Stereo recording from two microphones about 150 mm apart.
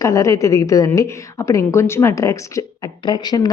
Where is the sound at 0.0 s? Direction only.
20° left (ahead or behind).